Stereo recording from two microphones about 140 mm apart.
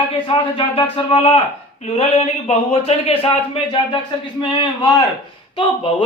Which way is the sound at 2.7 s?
45° left (ahead or behind).